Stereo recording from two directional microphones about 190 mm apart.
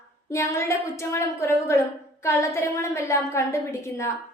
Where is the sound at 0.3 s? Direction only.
15° left (ahead or behind).